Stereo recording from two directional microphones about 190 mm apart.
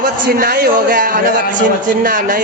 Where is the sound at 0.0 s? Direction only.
50° right (ahead or behind).